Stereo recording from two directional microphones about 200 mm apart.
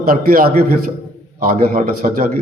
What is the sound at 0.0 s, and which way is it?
A man's voice, 45° right (ahead or behind).